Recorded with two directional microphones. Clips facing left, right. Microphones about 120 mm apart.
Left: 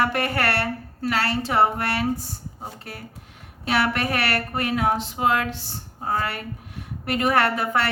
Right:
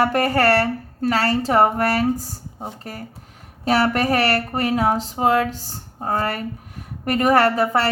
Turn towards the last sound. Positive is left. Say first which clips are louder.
# right 4 dB
turn(degrees=-35)  # may be behind; listen again after turning